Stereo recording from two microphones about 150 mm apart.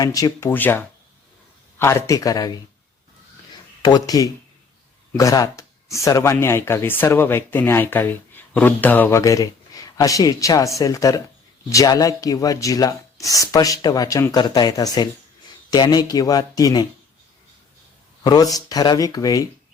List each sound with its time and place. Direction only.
0.0 s speech: 25° left (ahead or behind)
3.8 s speech: 25° left (ahead or behind)
18.2 s speech: 25° left (ahead or behind)